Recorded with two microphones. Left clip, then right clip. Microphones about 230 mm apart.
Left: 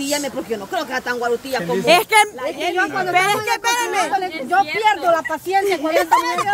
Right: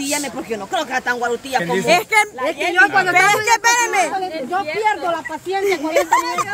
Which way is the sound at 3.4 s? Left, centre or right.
Centre.